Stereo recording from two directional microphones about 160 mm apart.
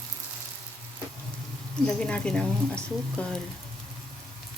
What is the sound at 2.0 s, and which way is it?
Speech, 5° left (ahead or behind).